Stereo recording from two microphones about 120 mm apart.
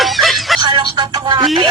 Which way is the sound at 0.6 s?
40° right (ahead or behind).